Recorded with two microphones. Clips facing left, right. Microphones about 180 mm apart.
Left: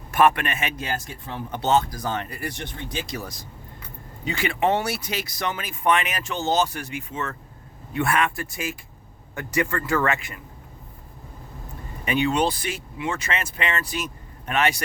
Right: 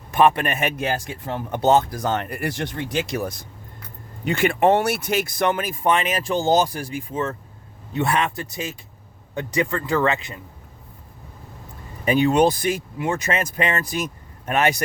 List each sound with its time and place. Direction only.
0.3 s speech: 40° right (ahead or behind)
0.8 s speech: 60° right (ahead or behind); by 1.8 s 45° right (ahead or behind)
1.9 s speech: 65° right (ahead or behind)
5.7 s speech: 30° right (ahead or behind)
12.0 s speech: 40° right (ahead or behind)